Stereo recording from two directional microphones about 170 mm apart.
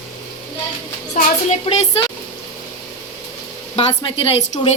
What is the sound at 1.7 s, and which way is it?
Speech, 30° left (ahead or behind).